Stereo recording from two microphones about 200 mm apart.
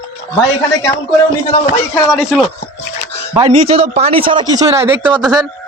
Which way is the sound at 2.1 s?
Centre (ahead or behind).